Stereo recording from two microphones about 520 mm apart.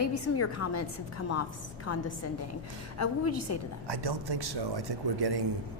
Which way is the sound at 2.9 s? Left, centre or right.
Left.